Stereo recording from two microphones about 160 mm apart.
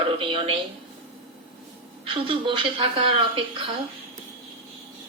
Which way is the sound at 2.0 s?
35° right (ahead or behind).